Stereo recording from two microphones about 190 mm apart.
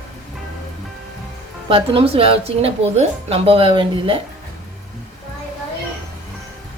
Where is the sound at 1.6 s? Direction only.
30° right (ahead or behind).